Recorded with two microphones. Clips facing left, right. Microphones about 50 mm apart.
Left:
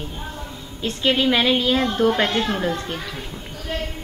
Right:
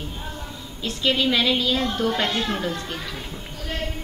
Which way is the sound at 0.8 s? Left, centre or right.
Left.